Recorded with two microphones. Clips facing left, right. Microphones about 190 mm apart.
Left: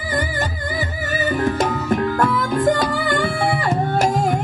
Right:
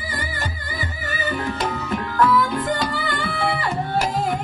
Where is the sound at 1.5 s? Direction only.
45° left (ahead or behind).